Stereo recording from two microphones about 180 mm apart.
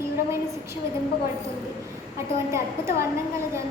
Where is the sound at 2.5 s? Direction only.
15° right (ahead or behind).